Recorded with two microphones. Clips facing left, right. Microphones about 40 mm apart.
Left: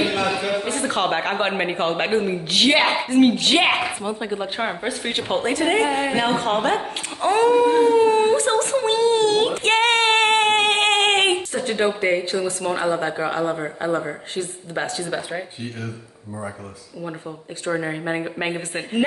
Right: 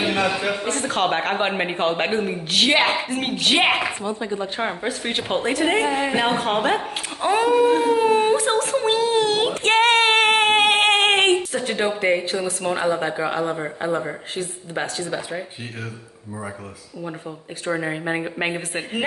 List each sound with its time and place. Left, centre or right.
0.3 s a sound: centre
0.7 s speech: centre
4.0 s speech: centre
4.6 s a woman's voice: centre
17.6 s a woman's voice: centre